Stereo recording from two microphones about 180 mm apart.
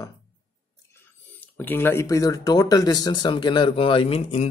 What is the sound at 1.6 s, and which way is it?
Speech, 10° left (ahead or behind).